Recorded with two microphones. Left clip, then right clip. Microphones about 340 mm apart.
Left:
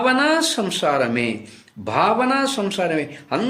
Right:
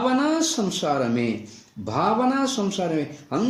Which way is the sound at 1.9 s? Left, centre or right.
Left.